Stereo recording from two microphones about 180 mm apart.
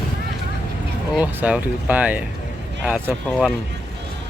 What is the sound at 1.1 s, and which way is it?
Speech, 5° right (ahead or behind).